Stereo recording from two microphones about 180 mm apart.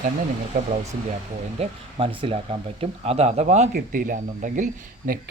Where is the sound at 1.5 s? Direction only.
30° right (ahead or behind).